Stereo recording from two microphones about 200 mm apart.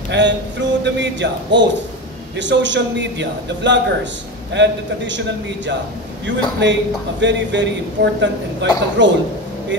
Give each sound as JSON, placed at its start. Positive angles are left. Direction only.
{"t": 0.1, "sound": "a man's voice", "side_deg": -65}
{"t": 6.2, "sound": "a man's voice", "side_deg": -65}